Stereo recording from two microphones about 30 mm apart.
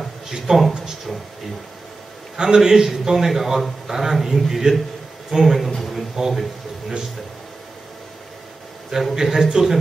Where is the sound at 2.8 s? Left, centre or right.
Centre.